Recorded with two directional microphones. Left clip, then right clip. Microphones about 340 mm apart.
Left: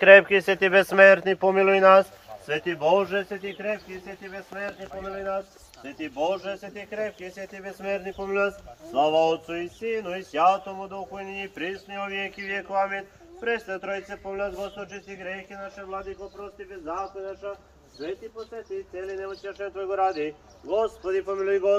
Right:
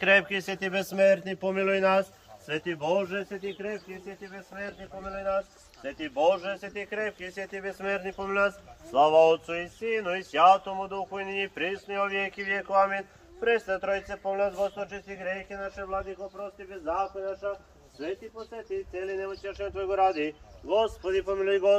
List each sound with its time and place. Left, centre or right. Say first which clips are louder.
0.1 s speech: left 10 dB; centre
18.9 s speech: even; right